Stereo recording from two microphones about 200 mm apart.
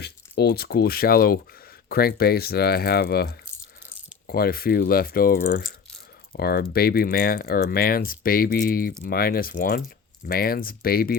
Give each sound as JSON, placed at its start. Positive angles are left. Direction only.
{"t": 0.0, "sound": "speech", "side_deg": 55}